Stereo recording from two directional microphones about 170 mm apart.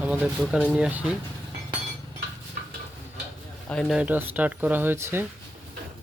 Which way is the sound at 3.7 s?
5° left (ahead or behind).